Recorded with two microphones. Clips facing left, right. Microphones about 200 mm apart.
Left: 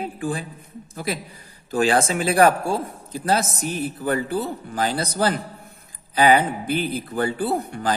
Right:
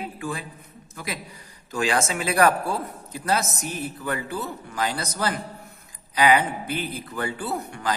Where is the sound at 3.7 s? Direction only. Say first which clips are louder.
Left 6 dB; 30° left (ahead or behind).